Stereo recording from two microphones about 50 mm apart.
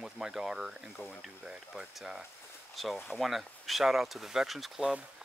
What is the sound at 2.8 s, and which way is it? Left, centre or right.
Speech, centre.